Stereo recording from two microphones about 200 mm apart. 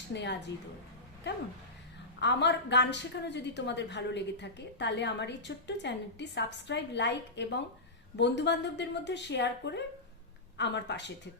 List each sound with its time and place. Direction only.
0.1 s a woman's voice: 60° left (ahead or behind)
2.2 s a woman's voice: 60° left (ahead or behind)